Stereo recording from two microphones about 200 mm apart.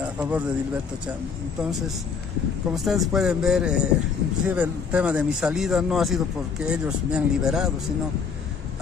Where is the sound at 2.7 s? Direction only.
Centre (ahead or behind).